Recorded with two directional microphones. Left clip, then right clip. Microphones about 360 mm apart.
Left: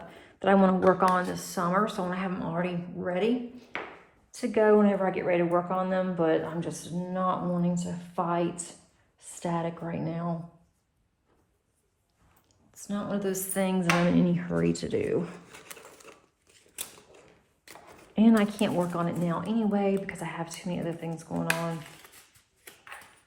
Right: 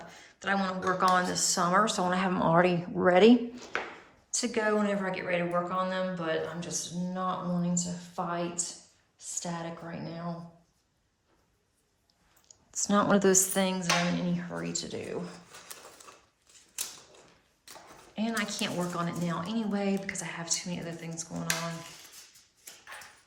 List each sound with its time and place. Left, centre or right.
0.1 s a sound: centre
0.9 s speech: centre
4.4 s a woman's voice: centre
12.7 s a woman's voice: centre
13.6 s speech: centre
14.3 s speech: centre
18.2 s speech: centre